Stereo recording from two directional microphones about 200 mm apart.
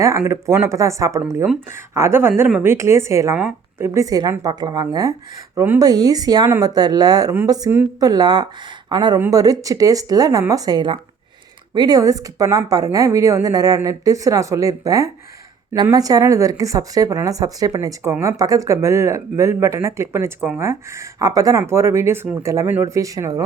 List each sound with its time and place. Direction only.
0.3 s speech: 15° right (ahead or behind)